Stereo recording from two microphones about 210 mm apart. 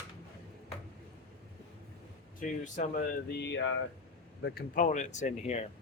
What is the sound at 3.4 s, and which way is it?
Speech, 60° left (ahead or behind).